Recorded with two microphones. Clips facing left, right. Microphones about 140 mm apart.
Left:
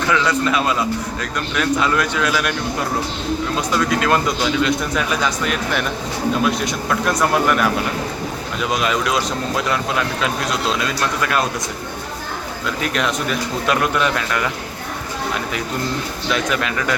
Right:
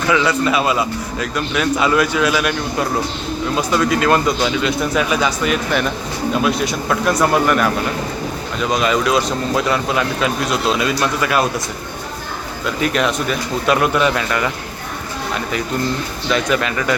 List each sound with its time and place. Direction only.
0.1 s a man's voice: 10° right (ahead or behind)
8.7 s speech: centre (ahead or behind)
12.6 s speech: centre (ahead or behind)
16.3 s speech: centre (ahead or behind)